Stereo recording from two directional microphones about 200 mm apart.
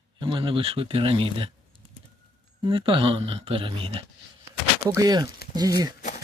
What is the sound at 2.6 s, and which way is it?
Speech, 25° right (ahead or behind).